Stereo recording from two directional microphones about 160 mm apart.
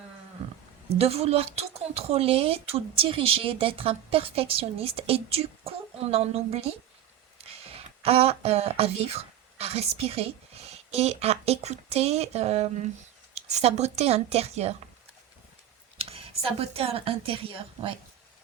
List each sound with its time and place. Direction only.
0.9 s speech: 40° right (ahead or behind)
16.0 s a woman's voice: 35° right (ahead or behind)